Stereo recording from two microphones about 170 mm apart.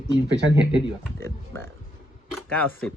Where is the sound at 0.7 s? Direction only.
15° left (ahead or behind).